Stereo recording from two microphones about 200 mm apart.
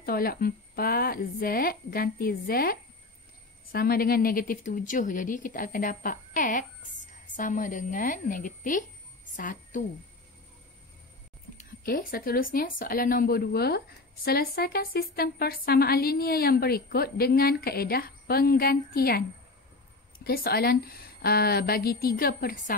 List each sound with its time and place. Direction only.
0.0 s a woman's voice: 50° left (ahead or behind)
11.5 s speech: 45° left (ahead or behind)
20.2 s speech: 50° left (ahead or behind)